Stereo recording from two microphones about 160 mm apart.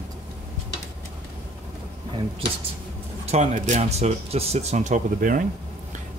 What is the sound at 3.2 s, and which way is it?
Speech, 45° right (ahead or behind).